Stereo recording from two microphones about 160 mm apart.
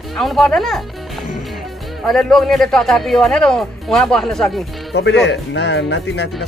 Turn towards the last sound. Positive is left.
turn(degrees=90)